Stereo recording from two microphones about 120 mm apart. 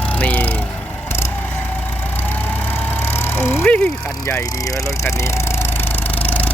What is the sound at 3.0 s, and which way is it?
Vehicle, 20° left (ahead or behind).